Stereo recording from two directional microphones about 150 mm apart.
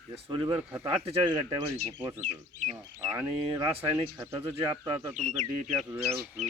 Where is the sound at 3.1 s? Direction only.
25° right (ahead or behind).